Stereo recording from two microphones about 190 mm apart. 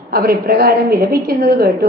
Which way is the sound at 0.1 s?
50° right (ahead or behind).